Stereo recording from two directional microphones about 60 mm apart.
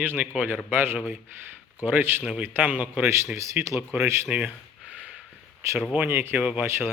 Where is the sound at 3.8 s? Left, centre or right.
Right.